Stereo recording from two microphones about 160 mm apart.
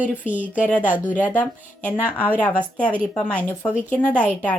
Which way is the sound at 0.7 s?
10° left (ahead or behind).